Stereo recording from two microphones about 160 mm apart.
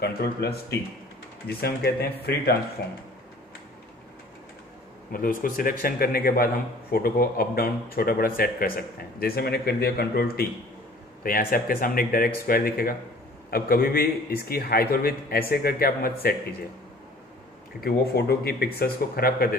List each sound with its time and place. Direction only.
0.0 s a man's voice: 75° left (ahead or behind)
1.6 s a man's voice: 75° left (ahead or behind)
5.1 s a man's voice: 60° left (ahead or behind)
17.7 s a man's voice: 75° left (ahead or behind)